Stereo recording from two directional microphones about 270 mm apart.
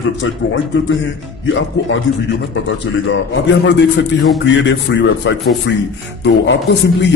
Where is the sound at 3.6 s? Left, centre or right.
Left.